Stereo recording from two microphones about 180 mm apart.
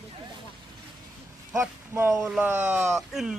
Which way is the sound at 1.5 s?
10° right (ahead or behind).